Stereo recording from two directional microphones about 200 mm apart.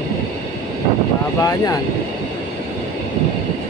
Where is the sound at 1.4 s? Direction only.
20° left (ahead or behind).